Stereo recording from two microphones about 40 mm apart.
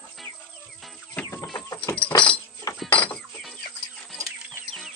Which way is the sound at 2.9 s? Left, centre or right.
Left.